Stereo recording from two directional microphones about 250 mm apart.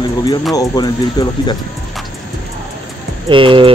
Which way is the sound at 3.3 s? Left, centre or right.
Centre.